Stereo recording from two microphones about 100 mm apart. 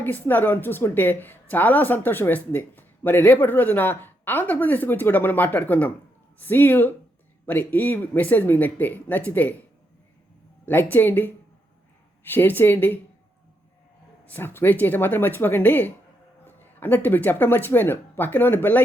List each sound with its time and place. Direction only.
0.0 s speech: 20° left (ahead or behind)
10.7 s speech: 20° left (ahead or behind)
14.3 s speech: 20° left (ahead or behind)